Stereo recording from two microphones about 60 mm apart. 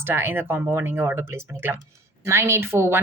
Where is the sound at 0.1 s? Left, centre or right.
Right.